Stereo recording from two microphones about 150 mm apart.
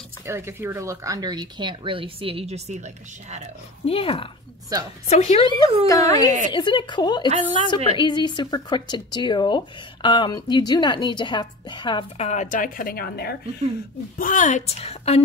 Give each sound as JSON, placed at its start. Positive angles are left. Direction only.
{"t": 0.2, "sound": "speech", "side_deg": -15}
{"t": 3.8, "sound": "a woman's voice", "side_deg": 40}
{"t": 5.1, "sound": "a woman's voice", "side_deg": 50}
{"t": 5.9, "sound": "a woman's voice", "side_deg": 20}
{"t": 12.2, "sound": "a woman's voice", "side_deg": 50}
{"t": 14.1, "sound": "a woman's voice", "side_deg": 60}